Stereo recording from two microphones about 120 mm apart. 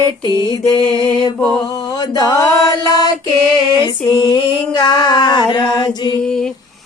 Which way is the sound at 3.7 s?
35° left (ahead or behind).